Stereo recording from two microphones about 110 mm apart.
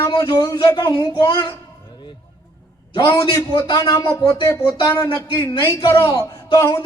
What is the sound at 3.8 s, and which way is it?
A man's voice, 30° left (ahead or behind).